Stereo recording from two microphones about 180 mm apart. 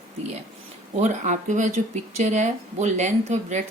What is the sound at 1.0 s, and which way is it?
Speech, 40° right (ahead or behind).